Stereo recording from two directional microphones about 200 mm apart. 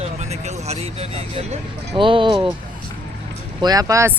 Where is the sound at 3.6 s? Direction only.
20° right (ahead or behind).